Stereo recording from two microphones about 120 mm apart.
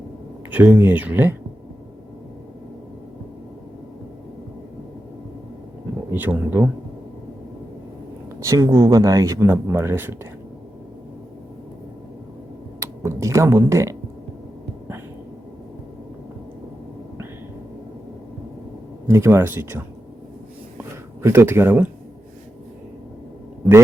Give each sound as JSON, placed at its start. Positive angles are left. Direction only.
{"t": 0.5, "sound": "speech", "side_deg": -15}
{"t": 6.1, "sound": "speech", "side_deg": -15}
{"t": 8.4, "sound": "speech", "side_deg": -30}
{"t": 12.8, "sound": "speech", "side_deg": -25}
{"t": 19.0, "sound": "speech", "side_deg": -20}
{"t": 20.7, "sound": "a sound", "side_deg": -20}